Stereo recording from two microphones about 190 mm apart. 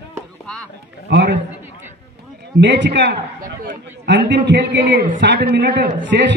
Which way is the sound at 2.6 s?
70° right (ahead or behind).